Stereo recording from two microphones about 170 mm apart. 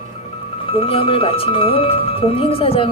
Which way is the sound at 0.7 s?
35° left (ahead or behind).